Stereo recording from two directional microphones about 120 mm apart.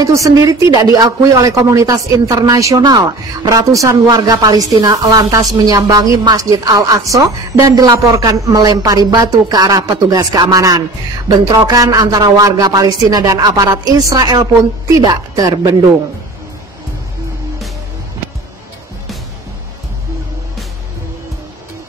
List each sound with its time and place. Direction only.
0.0 s a woman's voice: 30° right (ahead or behind)